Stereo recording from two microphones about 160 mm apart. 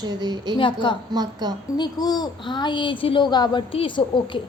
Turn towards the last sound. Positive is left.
turn(degrees=30)  # may be behind; listen again after turning